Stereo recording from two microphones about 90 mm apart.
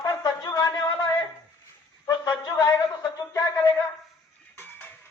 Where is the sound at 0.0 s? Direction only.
50° left (ahead or behind).